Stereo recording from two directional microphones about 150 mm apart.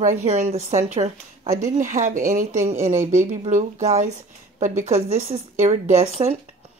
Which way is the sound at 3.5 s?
50° right (ahead or behind).